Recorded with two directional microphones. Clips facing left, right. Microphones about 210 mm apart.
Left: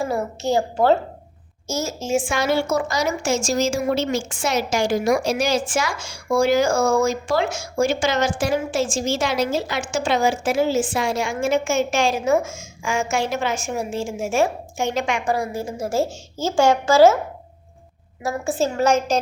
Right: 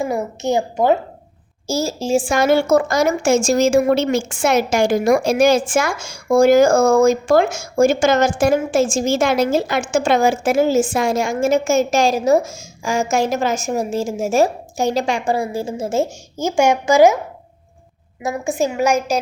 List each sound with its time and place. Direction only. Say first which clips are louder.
0.0 s a woman's voice: right 2 dB; 20° right (ahead or behind)
1.6 s a woman's voice: right 5 dB; 30° right (ahead or behind)
2.4 s a woman's voice: right 6 dB; 50° right (ahead or behind); by 17.2 s 15° right (ahead or behind)
18.2 s a child's voice: right 2 dB; 15° right (ahead or behind)